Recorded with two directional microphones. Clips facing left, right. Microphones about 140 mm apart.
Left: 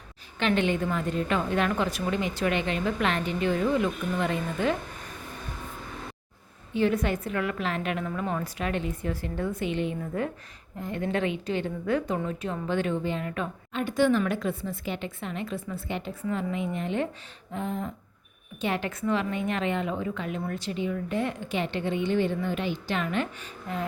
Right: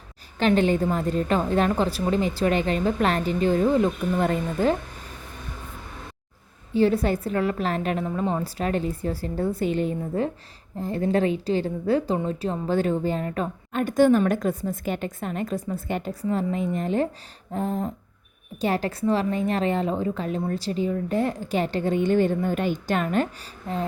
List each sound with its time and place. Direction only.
0.3 s a woman's voice: 40° right (ahead or behind)
6.7 s a woman's voice: 35° right (ahead or behind)
10.0 s a woman's voice: 30° right (ahead or behind)